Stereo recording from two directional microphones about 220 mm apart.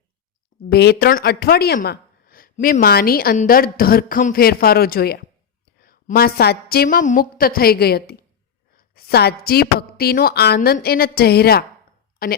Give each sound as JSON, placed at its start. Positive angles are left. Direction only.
{"t": 0.7, "sound": "speech", "side_deg": 45}